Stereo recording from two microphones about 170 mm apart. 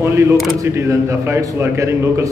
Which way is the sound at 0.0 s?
15° right (ahead or behind).